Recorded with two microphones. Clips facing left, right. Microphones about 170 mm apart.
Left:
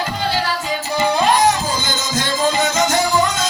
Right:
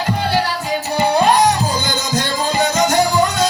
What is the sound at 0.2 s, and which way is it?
Music, 65° right (ahead or behind).